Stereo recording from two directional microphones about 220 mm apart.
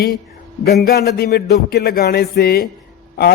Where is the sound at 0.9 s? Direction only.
45° left (ahead or behind).